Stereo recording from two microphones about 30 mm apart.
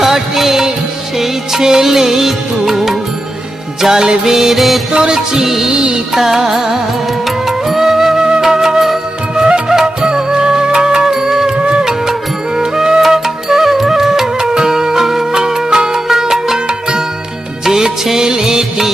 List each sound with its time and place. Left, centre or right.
0.0 s music: centre
3.8 s music: centre
4.5 s music: centre
4.9 s music: right
5.5 s music: centre
5.7 s music: right
6.1 s music: centre
8.1 s flute: right
8.4 s flute: centre
9.3 s music: right
11.5 s music: right
12.5 s music: right
16.0 s music: centre
18.0 s music: centre